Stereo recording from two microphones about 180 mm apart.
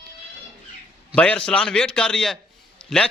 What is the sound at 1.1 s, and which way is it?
A man's voice, 5° left (ahead or behind).